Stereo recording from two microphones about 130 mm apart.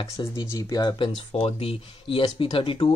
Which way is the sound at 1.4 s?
50° left (ahead or behind).